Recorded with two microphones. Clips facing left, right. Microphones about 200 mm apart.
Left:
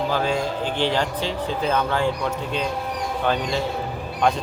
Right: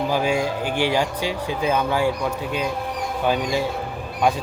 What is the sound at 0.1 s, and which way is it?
Speech, 10° right (ahead or behind).